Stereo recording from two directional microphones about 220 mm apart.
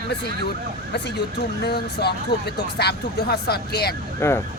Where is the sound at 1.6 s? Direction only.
45° left (ahead or behind).